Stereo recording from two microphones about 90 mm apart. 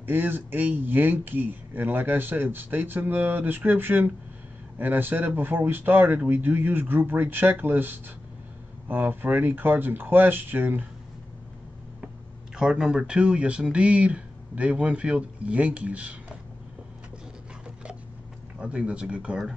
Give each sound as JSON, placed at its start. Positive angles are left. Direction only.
{"t": 0.0, "sound": "speech", "side_deg": -20}
{"t": 12.5, "sound": "speech", "side_deg": -10}
{"t": 18.6, "sound": "speech", "side_deg": -10}